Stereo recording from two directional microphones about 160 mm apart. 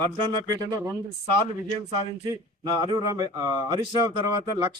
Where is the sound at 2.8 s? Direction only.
20° right (ahead or behind).